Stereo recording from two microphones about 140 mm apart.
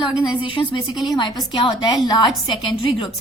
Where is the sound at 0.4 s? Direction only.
35° left (ahead or behind).